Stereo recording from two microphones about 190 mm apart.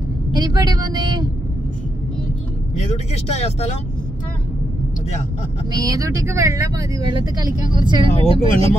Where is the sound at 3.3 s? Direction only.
35° left (ahead or behind).